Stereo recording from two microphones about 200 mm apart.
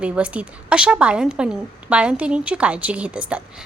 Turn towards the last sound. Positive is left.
turn(degrees=-5)  # may be behind; listen again after turning